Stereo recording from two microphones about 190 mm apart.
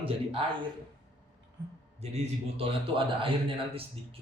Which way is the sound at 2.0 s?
35° right (ahead or behind).